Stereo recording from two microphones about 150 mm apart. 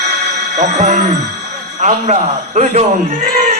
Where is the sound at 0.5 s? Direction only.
50° right (ahead or behind).